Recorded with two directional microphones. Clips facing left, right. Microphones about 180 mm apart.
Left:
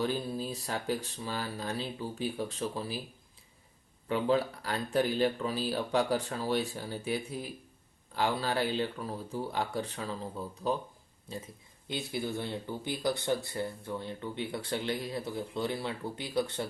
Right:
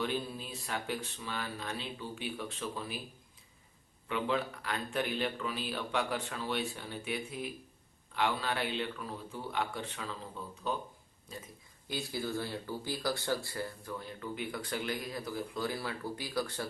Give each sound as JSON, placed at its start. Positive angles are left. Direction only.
{"t": 0.0, "sound": "speech", "side_deg": 35}
{"t": 4.1, "sound": "speech", "side_deg": 35}